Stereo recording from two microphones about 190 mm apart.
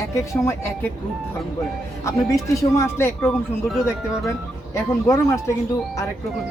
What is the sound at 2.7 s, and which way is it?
Speech, 15° left (ahead or behind).